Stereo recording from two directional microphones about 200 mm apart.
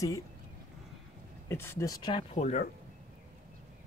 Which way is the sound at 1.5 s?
10° left (ahead or behind).